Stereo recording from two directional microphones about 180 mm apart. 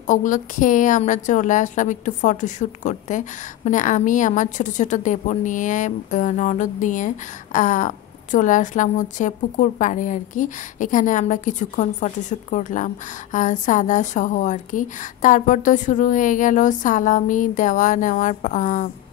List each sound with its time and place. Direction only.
0.0 s a woman's voice: 45° left (ahead or behind)